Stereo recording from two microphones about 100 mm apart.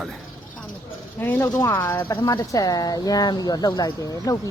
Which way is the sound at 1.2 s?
20° left (ahead or behind).